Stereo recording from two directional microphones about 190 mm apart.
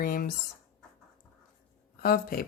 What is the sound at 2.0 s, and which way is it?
Speech, 50° left (ahead or behind).